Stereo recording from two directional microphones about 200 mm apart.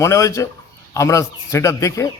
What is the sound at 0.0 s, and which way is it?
Speech, 15° left (ahead or behind).